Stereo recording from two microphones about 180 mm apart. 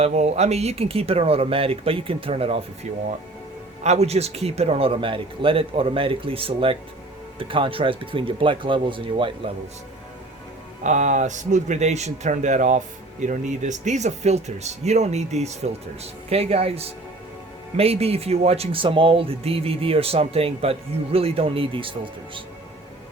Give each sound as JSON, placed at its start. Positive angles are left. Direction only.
{"t": 0.0, "sound": "speech", "side_deg": -40}
{"t": 3.8, "sound": "speech", "side_deg": -35}
{"t": 10.8, "sound": "speech", "side_deg": -40}